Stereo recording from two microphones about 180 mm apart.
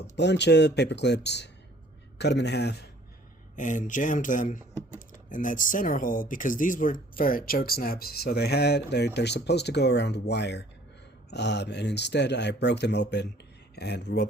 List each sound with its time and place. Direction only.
0.2 s speech: 70° left (ahead or behind)
3.5 s speech: 45° left (ahead or behind); by 14.3 s 70° left (ahead or behind)